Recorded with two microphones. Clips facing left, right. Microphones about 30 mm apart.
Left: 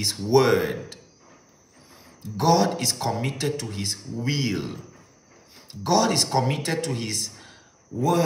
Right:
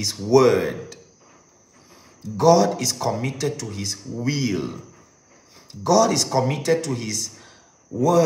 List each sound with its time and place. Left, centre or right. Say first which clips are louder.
0.2 s a man's voice: right 3 dB; left
2.2 s a man's voice: right 4 dB; left
4.0 s speech: right 2 dB; left
4.3 s a man's voice: right 3 dB; left
5.7 s a man's voice: right 4 dB; left